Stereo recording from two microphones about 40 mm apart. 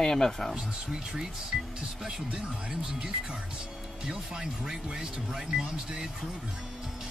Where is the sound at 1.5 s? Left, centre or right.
Centre.